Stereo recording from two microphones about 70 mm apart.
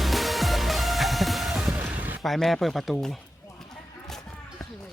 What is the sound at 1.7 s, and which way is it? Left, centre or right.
Music, right.